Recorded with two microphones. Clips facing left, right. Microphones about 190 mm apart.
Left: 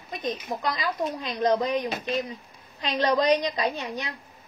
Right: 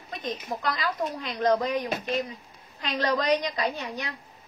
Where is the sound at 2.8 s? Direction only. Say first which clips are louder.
Left 3 dB; 20° left (ahead or behind).